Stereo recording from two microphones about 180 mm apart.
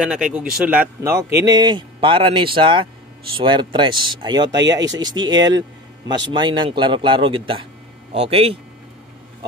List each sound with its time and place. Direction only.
0.0 s a man's voice: 5° right (ahead or behind); by 8.5 s 30° right (ahead or behind)